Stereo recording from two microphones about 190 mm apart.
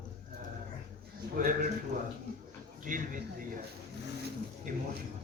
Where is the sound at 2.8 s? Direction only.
45° right (ahead or behind).